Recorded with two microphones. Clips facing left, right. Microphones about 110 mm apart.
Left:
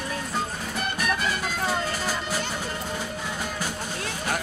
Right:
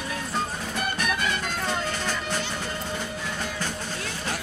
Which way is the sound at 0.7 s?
Centre (ahead or behind).